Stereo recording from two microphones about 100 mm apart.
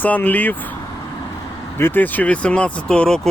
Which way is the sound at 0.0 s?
15° left (ahead or behind).